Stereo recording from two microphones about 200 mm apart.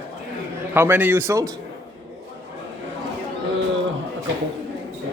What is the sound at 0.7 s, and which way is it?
Speech, 10° right (ahead or behind).